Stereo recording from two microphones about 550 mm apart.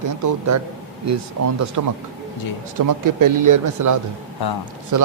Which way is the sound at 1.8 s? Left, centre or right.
Right.